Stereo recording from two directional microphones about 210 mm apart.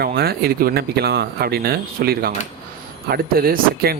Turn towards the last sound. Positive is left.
turn(degrees=-45)  # may be behind; listen again after turning